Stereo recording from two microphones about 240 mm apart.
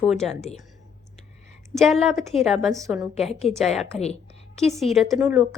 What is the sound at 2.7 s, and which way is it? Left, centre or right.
Speech, centre.